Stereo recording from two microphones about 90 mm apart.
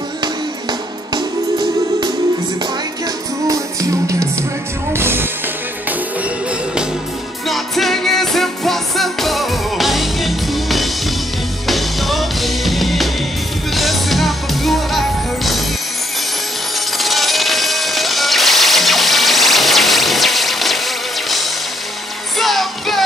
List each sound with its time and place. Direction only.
1.1 s music: 55° right (ahead or behind)
4.9 s music: 25° right (ahead or behind)
7.4 s music: centre (ahead or behind)
17.0 s music: centre (ahead or behind)